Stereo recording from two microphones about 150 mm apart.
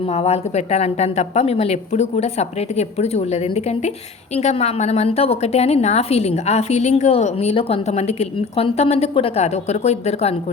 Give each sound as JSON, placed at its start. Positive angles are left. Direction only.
{"t": 0.1, "sound": "a woman's voice", "side_deg": 45}